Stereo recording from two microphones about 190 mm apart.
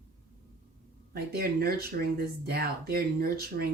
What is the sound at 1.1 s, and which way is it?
Speech, 50° right (ahead or behind).